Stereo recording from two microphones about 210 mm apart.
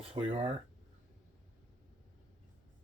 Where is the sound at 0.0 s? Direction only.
25° right (ahead or behind).